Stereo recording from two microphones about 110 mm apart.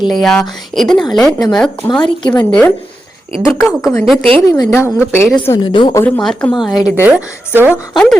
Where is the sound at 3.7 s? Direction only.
Centre (ahead or behind).